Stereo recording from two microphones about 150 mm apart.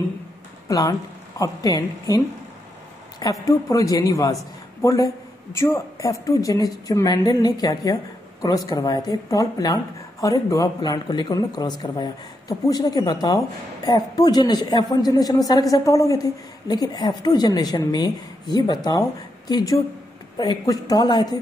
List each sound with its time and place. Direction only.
0.7 s a man's voice: 25° left (ahead or behind)